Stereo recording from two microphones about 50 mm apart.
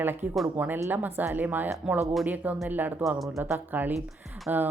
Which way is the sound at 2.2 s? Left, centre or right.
Right.